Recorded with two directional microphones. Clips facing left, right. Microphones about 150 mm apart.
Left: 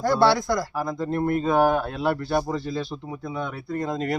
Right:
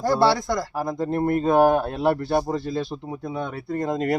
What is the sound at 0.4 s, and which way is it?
Speech, 25° right (ahead or behind).